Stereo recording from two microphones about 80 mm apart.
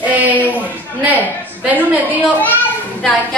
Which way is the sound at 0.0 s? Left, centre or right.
Centre.